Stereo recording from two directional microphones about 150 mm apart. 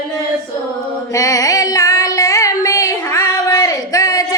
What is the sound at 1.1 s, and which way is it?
Female singing, 25° left (ahead or behind).